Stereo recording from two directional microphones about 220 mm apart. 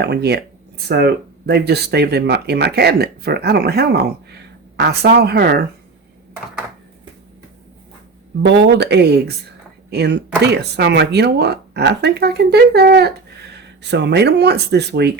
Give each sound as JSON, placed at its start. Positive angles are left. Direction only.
{"t": 0.0, "sound": "speech", "side_deg": -50}
{"t": 8.4, "sound": "speech", "side_deg": -50}